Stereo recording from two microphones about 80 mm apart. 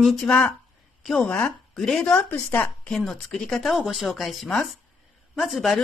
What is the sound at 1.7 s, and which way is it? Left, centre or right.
Speech, centre.